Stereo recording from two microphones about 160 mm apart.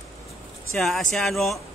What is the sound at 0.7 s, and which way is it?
Speech, 5° left (ahead or behind).